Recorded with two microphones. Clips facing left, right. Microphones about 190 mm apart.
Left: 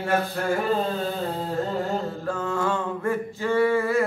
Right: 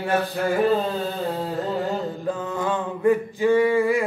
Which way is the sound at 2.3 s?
15° right (ahead or behind).